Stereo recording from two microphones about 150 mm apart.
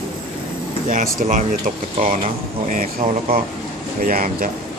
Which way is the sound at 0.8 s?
65° right (ahead or behind).